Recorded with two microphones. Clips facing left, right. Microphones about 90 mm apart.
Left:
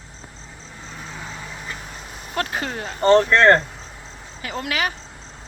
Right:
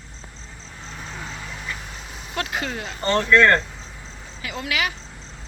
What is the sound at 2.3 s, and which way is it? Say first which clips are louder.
Speech: left 2 dB; 35° left (ahead or behind).